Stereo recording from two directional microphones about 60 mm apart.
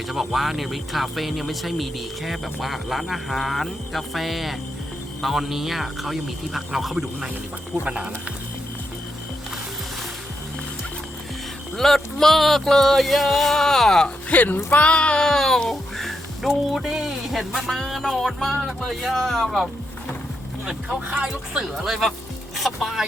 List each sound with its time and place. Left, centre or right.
0.1 s speech: centre
11.8 s speech: centre
14.3 s speech: left; by 19.6 s centre
21.5 s speech: centre